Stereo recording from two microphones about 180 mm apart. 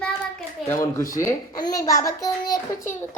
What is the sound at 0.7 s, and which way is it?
A child's voice, 15° left (ahead or behind).